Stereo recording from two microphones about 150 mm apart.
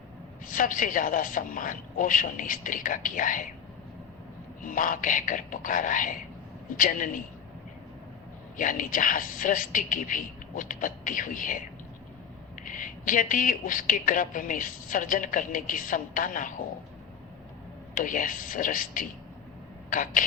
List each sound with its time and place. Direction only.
0.5 s a woman's voice: 65° left (ahead or behind)
4.6 s a woman's voice: 65° left (ahead or behind)
8.5 s a woman's voice: 65° left (ahead or behind)
12.6 s a woman's voice: 60° left (ahead or behind)
17.9 s a woman's voice: 60° left (ahead or behind)